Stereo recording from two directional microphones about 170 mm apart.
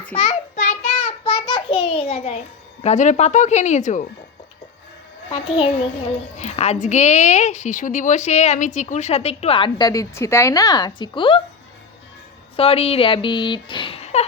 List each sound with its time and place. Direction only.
0.2 s child singing: 40° left (ahead or behind)
2.8 s speech: 45° left (ahead or behind)
5.3 s a woman's voice: 35° left (ahead or behind)
12.5 s speech: 35° left (ahead or behind)